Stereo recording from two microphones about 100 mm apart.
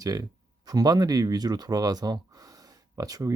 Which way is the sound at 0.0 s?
40° right (ahead or behind).